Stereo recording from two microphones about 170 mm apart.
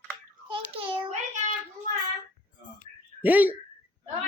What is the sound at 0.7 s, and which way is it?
Child singing, 35° right (ahead or behind).